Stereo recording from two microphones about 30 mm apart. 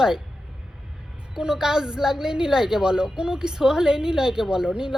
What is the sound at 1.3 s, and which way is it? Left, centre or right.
A woman's voice, right.